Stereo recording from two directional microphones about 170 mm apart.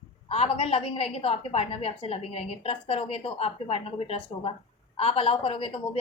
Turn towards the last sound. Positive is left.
turn(degrees=35)  # may be behind; listen again after turning